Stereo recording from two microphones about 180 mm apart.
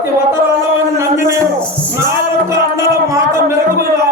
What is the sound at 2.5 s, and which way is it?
Music, 15° right (ahead or behind).